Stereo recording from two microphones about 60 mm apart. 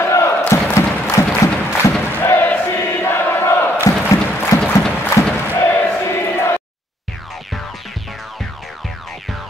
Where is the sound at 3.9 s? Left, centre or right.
Left.